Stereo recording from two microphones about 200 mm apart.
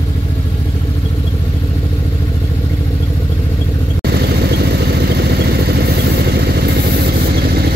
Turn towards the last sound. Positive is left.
turn(degrees=-50)  # may be behind; listen again after turning